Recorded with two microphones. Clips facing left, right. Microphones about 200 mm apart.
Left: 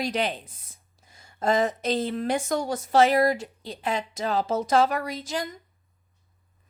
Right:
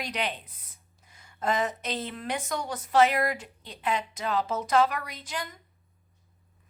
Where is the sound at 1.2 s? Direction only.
35° left (ahead or behind).